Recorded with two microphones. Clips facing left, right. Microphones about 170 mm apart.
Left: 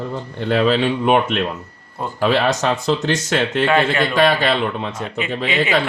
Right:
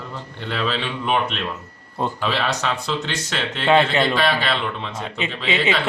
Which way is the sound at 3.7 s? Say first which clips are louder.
Right 4 dB; 20° right (ahead or behind).